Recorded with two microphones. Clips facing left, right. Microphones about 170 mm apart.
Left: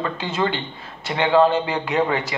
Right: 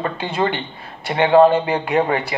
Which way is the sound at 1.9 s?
35° right (ahead or behind).